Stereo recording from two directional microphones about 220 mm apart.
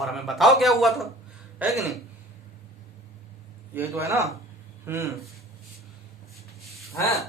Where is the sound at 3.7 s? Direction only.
10° right (ahead or behind).